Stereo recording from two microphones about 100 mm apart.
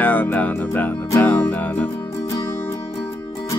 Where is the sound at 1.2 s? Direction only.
20° left (ahead or behind).